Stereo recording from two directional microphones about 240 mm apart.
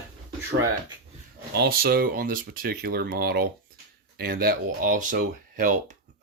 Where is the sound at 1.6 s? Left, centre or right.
Right.